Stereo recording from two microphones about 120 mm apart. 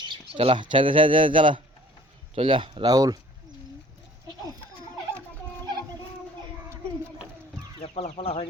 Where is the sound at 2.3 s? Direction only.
50° right (ahead or behind).